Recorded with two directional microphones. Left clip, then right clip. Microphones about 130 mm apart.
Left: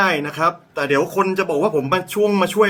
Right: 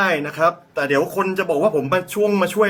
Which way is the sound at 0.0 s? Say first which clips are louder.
Even; 30° left (ahead or behind).